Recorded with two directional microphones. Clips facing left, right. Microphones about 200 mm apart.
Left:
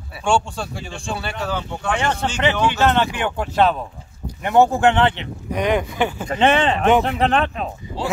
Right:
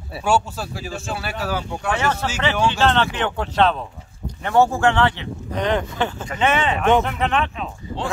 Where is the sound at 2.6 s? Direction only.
10° left (ahead or behind).